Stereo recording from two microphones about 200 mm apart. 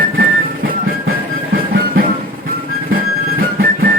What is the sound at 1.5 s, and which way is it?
Music, 50° right (ahead or behind).